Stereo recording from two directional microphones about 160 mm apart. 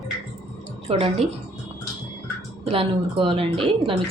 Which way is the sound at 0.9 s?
40° right (ahead or behind).